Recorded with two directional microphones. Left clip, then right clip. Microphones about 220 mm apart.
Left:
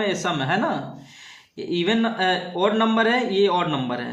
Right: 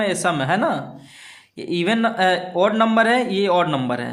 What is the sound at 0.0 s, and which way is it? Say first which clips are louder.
Speech: right 3 dB; 35° right (ahead or behind).